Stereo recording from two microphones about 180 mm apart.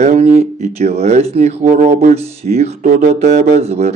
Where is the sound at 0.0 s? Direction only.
40° right (ahead or behind).